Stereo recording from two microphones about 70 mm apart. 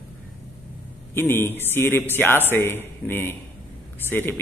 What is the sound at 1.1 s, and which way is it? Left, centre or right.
A man's voice, left.